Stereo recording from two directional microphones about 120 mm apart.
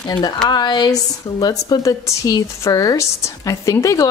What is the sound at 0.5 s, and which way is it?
A woman's voice, 35° left (ahead or behind).